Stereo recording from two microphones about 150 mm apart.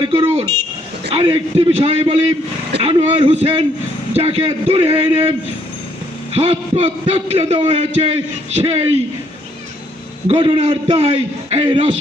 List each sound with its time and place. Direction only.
0.0 s a man's voice: 35° right (ahead or behind)
6.3 s a man's voice: 40° right (ahead or behind)
10.2 s a man's voice: 40° right (ahead or behind)